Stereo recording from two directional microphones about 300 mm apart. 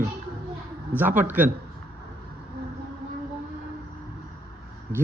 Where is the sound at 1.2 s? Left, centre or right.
Centre.